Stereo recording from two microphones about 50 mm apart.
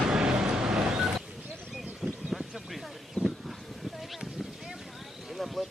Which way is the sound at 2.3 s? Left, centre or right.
Centre.